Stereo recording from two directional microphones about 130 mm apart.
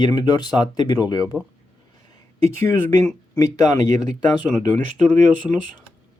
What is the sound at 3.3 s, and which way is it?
Speech, 30° left (ahead or behind).